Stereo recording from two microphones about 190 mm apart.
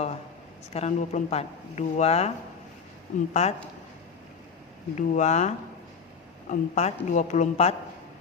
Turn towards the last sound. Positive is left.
turn(degrees=35)  # may be behind; listen again after turning